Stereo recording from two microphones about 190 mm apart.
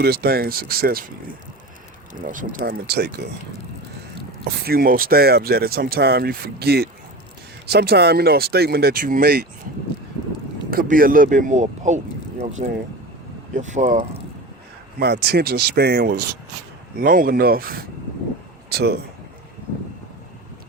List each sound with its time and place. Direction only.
0.0 s speech: 55° right (ahead or behind)
2.2 s speech: 45° right (ahead or behind)
4.6 s speech: 50° right (ahead or behind)
10.7 s speech: 50° right (ahead or behind)
14.9 s speech: 60° right (ahead or behind)